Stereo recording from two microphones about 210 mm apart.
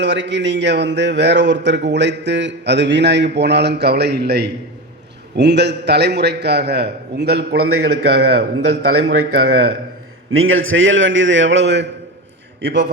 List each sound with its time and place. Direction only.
0.0 s a man's voice: 55° right (ahead or behind)
10.3 s a man's voice: 75° right (ahead or behind)